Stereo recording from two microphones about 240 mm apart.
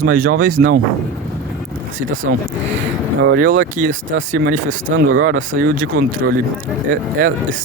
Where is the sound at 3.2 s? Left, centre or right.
Right.